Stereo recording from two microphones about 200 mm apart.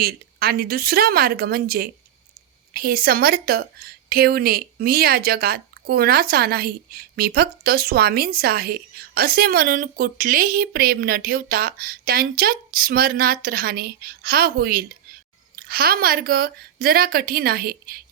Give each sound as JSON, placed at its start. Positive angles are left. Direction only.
{"t": 0.0, "sound": "speech", "side_deg": -50}